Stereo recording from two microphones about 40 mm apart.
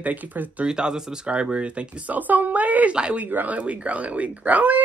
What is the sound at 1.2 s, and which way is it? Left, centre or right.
Speech, right.